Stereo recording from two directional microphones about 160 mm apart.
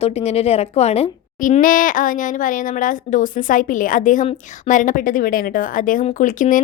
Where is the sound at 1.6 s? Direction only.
55° left (ahead or behind).